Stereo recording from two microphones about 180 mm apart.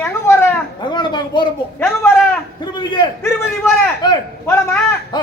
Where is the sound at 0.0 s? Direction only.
15° left (ahead or behind).